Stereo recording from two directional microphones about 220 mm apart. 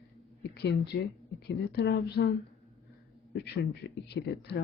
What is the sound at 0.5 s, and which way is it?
Speech, 50° left (ahead or behind).